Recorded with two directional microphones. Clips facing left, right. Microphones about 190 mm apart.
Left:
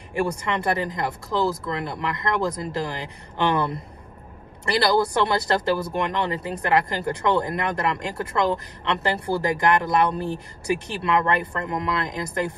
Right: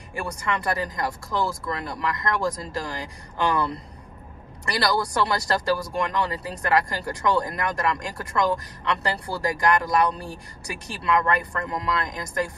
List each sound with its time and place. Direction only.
0.1 s speech: 25° left (ahead or behind)